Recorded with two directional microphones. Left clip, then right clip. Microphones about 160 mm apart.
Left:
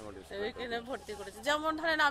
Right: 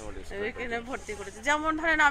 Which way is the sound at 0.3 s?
25° left (ahead or behind).